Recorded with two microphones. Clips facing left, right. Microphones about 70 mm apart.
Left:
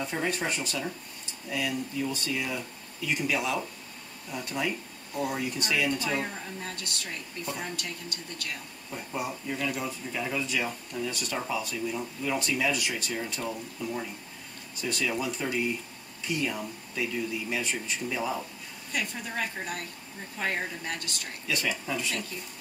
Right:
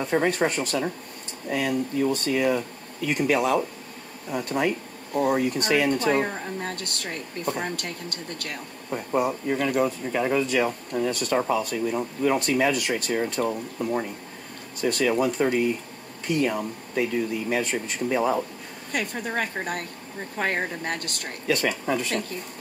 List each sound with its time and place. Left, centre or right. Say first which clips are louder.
0.0 s speech: right 8 dB; right